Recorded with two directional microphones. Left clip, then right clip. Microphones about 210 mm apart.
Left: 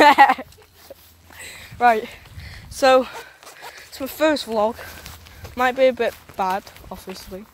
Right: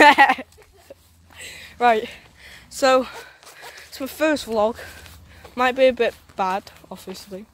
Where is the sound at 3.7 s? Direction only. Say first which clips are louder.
Even; centre (ahead or behind).